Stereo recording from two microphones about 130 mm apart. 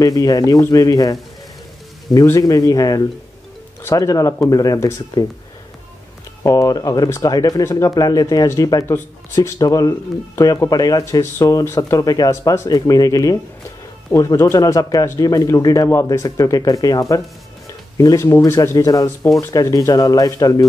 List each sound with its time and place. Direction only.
0.0 s speech: 30° left (ahead or behind)
2.1 s speech: 25° left (ahead or behind)
6.4 s speech: 25° left (ahead or behind)